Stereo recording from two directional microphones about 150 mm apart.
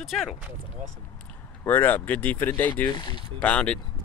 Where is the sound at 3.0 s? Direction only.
30° left (ahead or behind).